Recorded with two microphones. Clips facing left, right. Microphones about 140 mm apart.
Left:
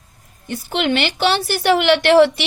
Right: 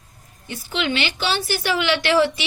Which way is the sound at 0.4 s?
60° left (ahead or behind).